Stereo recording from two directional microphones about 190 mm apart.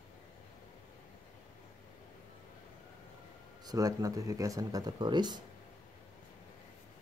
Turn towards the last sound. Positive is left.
turn(degrees=-20)  # may be behind; listen again after turning